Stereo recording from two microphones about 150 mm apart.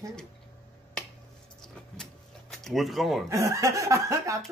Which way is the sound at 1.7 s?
5° left (ahead or behind).